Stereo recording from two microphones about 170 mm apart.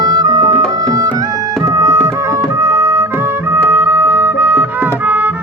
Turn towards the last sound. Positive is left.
turn(degrees=-10)  # may be behind; listen again after turning